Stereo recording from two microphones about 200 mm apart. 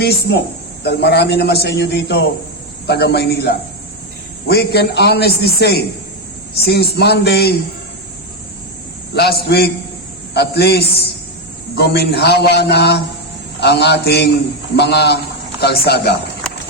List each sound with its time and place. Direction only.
0.0 s a man's voice: 55° left (ahead or behind)
9.1 s a man's voice: 55° left (ahead or behind)